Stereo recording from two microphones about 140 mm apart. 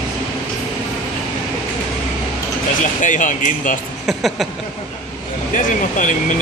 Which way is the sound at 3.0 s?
65° left (ahead or behind).